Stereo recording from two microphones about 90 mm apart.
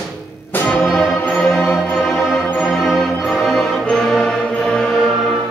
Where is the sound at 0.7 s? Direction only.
5° left (ahead or behind).